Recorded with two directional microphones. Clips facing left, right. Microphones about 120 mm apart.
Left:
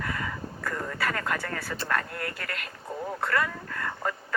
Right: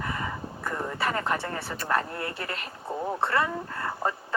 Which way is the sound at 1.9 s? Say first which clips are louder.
Right 3 dB; 25° right (ahead or behind).